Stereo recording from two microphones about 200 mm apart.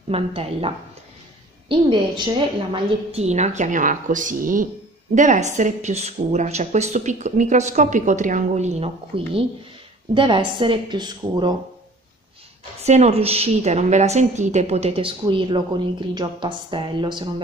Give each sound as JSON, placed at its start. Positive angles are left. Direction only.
{"t": 0.1, "sound": "a woman's voice", "side_deg": -30}
{"t": 12.8, "sound": "a woman's voice", "side_deg": -35}